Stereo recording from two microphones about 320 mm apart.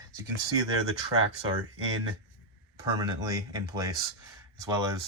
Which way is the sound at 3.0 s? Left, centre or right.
Centre.